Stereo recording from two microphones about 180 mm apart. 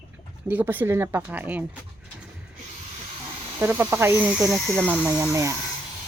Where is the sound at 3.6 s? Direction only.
10° right (ahead or behind).